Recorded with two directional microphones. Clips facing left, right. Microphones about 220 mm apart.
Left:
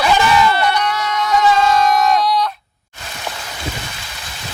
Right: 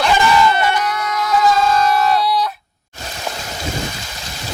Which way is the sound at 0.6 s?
10° right (ahead or behind).